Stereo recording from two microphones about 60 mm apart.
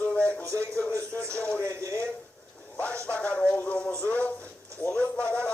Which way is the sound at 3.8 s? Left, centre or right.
Left.